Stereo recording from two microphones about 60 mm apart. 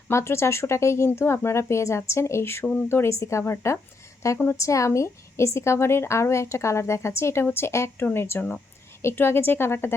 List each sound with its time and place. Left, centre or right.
0.1 s speech: left
3.2 s speech: left
4.9 s a woman's voice: left